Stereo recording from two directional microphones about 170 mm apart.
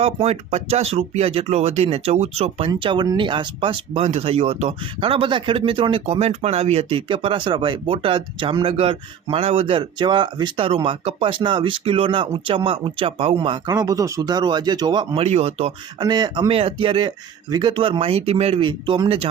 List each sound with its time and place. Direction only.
0.0 s speech: 35° right (ahead or behind)
15.2 s speech: 40° right (ahead or behind)
16.0 s speech: 25° right (ahead or behind)